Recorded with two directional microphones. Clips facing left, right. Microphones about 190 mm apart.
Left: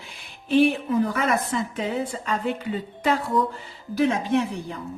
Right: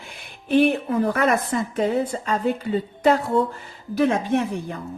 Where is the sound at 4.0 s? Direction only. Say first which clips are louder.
Right 1 dB; 50° right (ahead or behind).